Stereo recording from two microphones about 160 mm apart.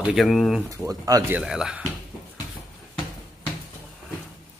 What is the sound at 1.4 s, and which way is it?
Speech, 5° right (ahead or behind).